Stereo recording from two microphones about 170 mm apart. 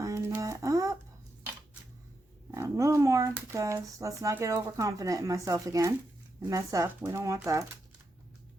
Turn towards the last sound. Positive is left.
turn(degrees=-20)  # may be behind; listen again after turning